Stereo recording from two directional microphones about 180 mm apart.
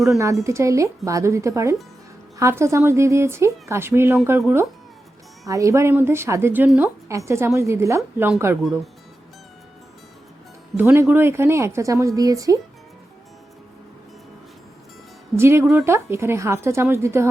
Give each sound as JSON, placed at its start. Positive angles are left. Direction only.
{"t": 0.4, "sound": "a woman's voice", "side_deg": -15}
{"t": 10.8, "sound": "a woman's voice", "side_deg": -10}
{"t": 15.4, "sound": "a woman's voice", "side_deg": -15}